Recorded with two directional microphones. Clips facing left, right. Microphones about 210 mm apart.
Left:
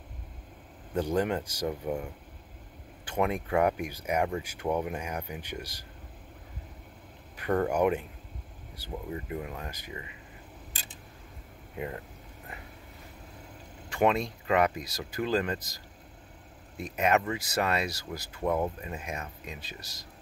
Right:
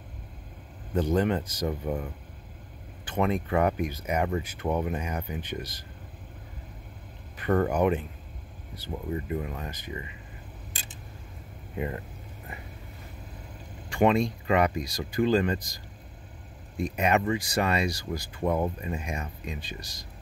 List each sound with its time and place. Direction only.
0.9 s speech: 10° left (ahead or behind)
3.1 s speech: 10° left (ahead or behind)
7.3 s speech: 5° left (ahead or behind)
11.7 s speech: centre (ahead or behind)
13.8 s speech: centre (ahead or behind)